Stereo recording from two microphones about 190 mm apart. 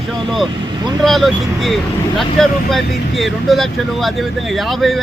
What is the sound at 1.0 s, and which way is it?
Speech, centre (ahead or behind).